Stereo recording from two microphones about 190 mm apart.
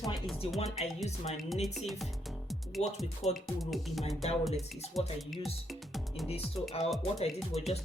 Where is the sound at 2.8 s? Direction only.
35° left (ahead or behind).